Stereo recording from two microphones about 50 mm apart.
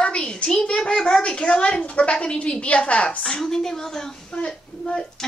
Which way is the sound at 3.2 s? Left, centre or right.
Centre.